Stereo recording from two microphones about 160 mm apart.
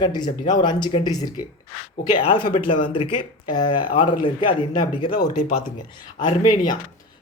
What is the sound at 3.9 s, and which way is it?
Speech, 30° left (ahead or behind).